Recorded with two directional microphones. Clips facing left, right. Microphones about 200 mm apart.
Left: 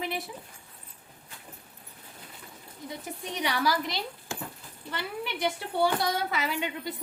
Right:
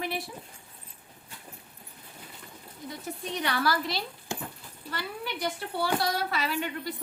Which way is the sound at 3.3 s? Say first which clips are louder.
Left 1 dB; 15° left (ahead or behind).